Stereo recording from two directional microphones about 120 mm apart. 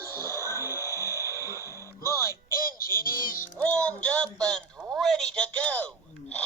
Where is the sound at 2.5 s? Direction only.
30° right (ahead or behind).